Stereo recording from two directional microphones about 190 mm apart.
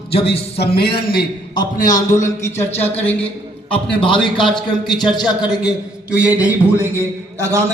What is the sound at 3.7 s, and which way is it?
A man's voice, 25° left (ahead or behind).